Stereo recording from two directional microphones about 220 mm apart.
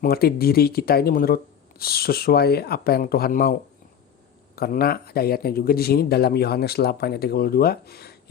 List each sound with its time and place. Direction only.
0.0 s speech: 45° left (ahead or behind)